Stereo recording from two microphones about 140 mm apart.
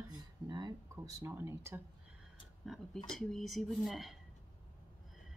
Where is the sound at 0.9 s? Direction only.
15° right (ahead or behind).